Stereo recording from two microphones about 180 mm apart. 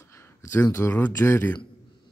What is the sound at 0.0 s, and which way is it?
Speech, 15° left (ahead or behind).